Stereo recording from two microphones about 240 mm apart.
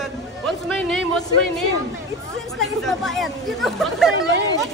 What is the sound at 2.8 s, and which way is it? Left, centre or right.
Speech, centre.